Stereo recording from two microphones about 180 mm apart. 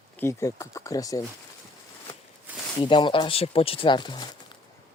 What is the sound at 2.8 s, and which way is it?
Speech, 25° left (ahead or behind).